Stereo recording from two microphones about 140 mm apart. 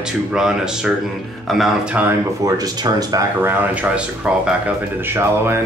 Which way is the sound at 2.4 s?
25° right (ahead or behind).